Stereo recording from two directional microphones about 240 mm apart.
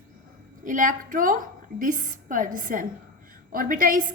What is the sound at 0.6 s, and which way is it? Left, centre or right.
A woman's voice, right.